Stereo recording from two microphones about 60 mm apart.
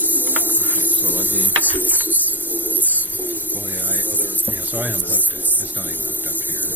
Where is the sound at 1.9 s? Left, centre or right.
Right.